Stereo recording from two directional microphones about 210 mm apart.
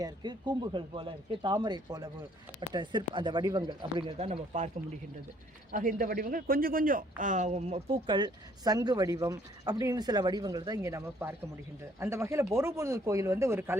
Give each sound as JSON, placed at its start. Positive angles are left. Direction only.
{"t": 0.0, "sound": "speech", "side_deg": -20}
{"t": 5.7, "sound": "speech", "side_deg": -40}